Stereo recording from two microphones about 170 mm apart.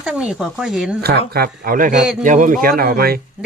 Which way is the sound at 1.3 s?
60° right (ahead or behind).